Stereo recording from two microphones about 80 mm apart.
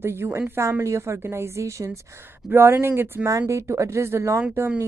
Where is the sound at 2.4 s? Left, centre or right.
Right.